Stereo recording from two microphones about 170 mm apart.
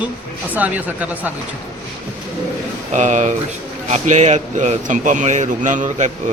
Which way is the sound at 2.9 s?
45° right (ahead or behind).